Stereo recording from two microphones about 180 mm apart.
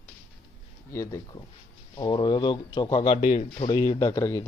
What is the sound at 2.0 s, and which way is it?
A man's voice, 25° left (ahead or behind).